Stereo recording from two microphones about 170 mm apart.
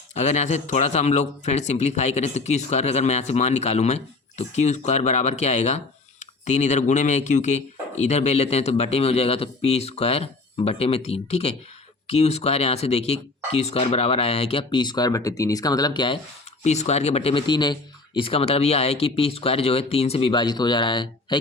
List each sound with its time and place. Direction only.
0.1 s a man's voice: 40° left (ahead or behind)
16.6 s a man's voice: 40° left (ahead or behind)